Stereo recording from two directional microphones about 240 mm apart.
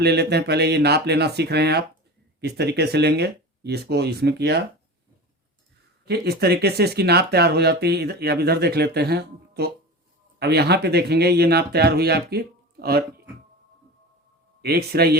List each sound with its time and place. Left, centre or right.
0.0 s speech: right
6.1 s speech: right
14.6 s speech: right